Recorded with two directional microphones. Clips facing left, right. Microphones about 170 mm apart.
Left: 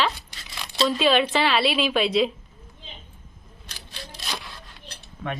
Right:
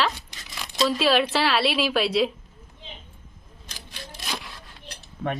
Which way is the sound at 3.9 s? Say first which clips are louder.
Even; 10° right (ahead or behind).